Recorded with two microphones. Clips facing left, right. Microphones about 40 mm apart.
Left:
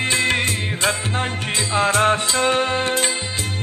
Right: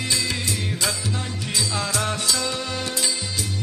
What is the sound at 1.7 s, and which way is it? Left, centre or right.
Music, left.